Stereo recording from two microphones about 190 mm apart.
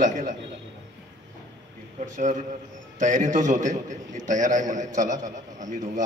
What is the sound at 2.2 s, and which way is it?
A man's voice, 40° right (ahead or behind).